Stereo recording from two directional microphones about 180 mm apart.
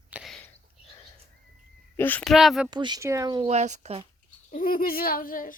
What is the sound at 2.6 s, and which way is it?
Speech, 25° right (ahead or behind).